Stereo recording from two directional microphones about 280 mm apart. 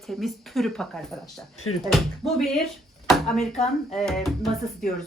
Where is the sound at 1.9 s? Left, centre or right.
Centre.